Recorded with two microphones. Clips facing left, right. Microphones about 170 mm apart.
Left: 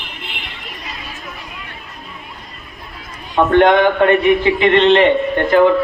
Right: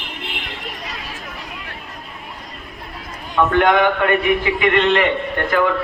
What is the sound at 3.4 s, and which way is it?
A man's voice, 30° left (ahead or behind).